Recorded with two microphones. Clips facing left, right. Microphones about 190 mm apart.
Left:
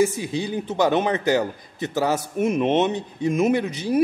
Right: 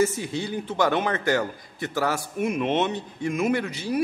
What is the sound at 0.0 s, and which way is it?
Speech, 15° left (ahead or behind).